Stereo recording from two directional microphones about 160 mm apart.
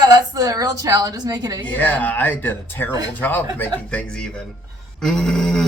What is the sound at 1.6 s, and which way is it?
Speech, 10° left (ahead or behind).